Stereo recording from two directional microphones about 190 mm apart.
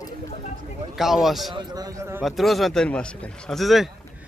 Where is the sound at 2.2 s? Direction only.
Centre (ahead or behind).